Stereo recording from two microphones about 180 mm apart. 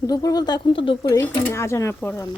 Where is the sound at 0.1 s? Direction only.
20° left (ahead or behind).